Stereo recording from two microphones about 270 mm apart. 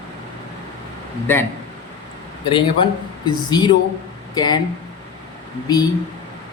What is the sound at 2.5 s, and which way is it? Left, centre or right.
Speech, centre.